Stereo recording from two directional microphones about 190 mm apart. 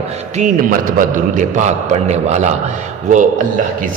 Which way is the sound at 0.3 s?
45° right (ahead or behind).